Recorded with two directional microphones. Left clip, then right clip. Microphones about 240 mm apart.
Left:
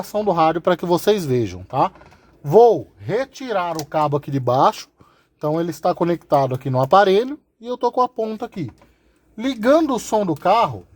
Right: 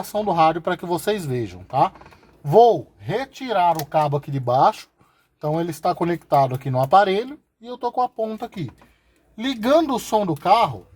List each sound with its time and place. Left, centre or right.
0.0 s speech: left